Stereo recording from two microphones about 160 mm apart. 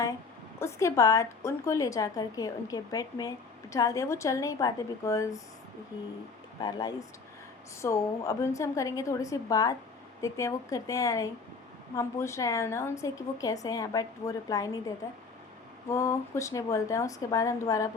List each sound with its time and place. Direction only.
0.6 s a woman's voice: 20° left (ahead or behind)
6.6 s a woman's voice: 25° left (ahead or behind)